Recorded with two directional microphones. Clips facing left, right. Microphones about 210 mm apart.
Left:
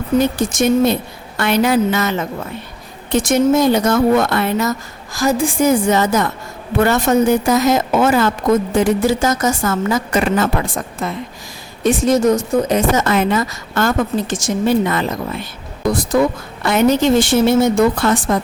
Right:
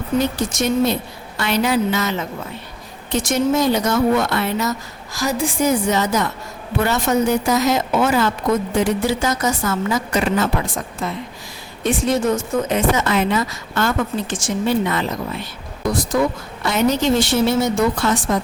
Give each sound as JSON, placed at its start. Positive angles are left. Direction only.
{"t": 0.3, "sound": "a woman's voice", "side_deg": 50}
{"t": 16.6, "sound": "a woman's voice", "side_deg": 55}